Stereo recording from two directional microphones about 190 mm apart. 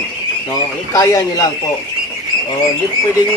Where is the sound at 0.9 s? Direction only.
20° left (ahead or behind).